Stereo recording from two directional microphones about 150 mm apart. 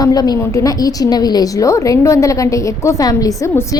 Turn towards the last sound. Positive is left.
turn(degrees=20)  # may be behind; listen again after turning